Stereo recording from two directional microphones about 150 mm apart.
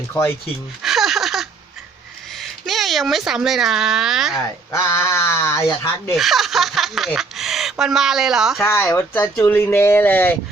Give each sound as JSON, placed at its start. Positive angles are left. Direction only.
{"t": 0.1, "sound": "speech", "side_deg": 15}
{"t": 0.8, "sound": "a sound", "side_deg": 0}
{"t": 2.3, "sound": "speech", "side_deg": 0}
{"t": 4.7, "sound": "speech", "side_deg": 20}
{"t": 6.1, "sound": "speech", "side_deg": 0}
{"t": 8.6, "sound": "speech", "side_deg": 15}